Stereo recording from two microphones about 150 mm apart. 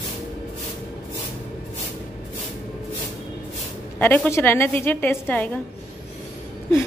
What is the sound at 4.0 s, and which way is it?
A woman's voice, 15° left (ahead or behind).